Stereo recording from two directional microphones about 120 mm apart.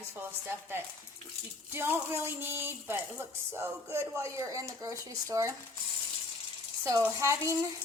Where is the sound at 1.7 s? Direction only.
20° right (ahead or behind).